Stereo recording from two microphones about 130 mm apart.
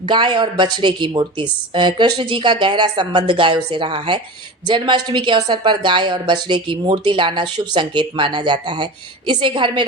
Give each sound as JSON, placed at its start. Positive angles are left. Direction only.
{"t": 0.1, "sound": "a woman's voice", "side_deg": -35}